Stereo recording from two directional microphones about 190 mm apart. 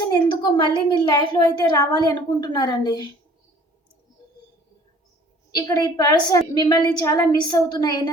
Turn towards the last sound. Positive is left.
turn(degrees=20)  # may be behind; listen again after turning